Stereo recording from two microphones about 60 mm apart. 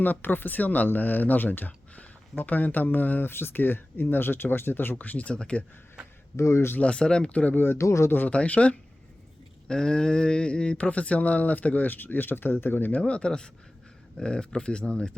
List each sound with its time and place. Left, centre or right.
0.0 s speech: left; by 5.6 s centre
6.3 s speech: left
6.7 s speech: centre
7.8 s speech: left
8.3 s speech: left
12.9 s speech: centre